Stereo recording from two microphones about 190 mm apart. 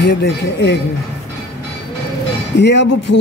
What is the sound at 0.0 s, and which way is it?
Speech, 65° left (ahead or behind).